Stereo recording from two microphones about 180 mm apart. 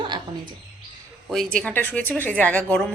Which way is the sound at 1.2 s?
Centre (ahead or behind).